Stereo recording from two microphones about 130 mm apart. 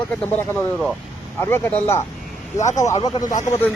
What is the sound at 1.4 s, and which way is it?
Speech, 15° left (ahead or behind).